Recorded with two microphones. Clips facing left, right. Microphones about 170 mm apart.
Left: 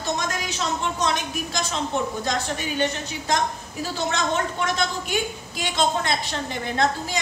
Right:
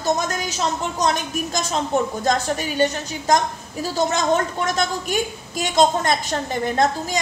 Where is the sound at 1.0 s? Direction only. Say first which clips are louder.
Right 3 dB; 45° right (ahead or behind).